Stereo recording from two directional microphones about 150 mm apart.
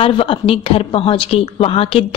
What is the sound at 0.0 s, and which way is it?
A woman's voice, 40° left (ahead or behind).